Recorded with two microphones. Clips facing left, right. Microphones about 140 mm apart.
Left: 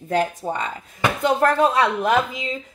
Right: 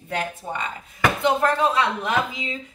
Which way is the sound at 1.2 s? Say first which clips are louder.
Left 4 dB; 50° left (ahead or behind).